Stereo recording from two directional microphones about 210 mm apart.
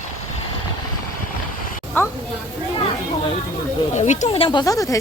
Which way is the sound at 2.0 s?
10° left (ahead or behind).